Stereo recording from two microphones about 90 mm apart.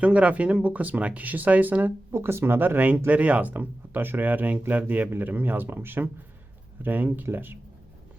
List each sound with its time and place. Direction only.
0.0 s speech: 15° right (ahead or behind)